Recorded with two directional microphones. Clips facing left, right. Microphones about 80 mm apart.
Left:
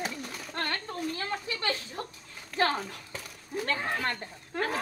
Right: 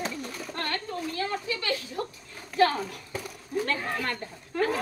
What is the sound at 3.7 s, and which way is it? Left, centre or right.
Speech, left.